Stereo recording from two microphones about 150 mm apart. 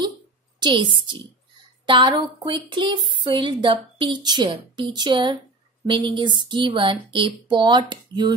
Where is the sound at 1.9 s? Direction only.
30° right (ahead or behind).